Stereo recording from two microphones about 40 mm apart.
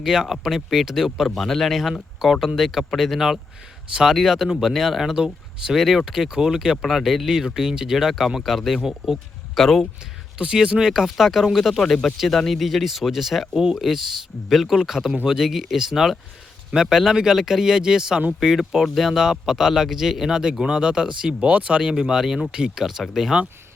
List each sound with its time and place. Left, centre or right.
0.0 s speech: centre
1.4 s speech: centre
5.1 s speech: centre
5.7 s speech: centre
9.6 s speech: centre
10.3 s speech: right; by 14.8 s centre
14.8 s speech: centre